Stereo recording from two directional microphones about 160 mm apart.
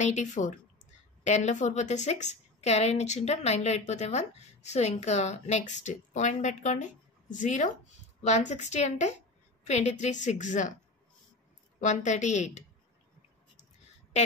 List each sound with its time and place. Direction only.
0.0 s a woman's voice: 50° left (ahead or behind)
11.8 s a woman's voice: 50° left (ahead or behind)